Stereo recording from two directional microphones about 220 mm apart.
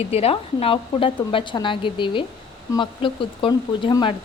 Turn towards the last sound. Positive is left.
turn(degrees=20)  # may be behind; listen again after turning